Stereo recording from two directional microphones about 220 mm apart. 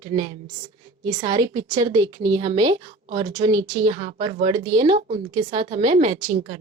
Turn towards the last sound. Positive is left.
turn(degrees=-30)  # may be behind; listen again after turning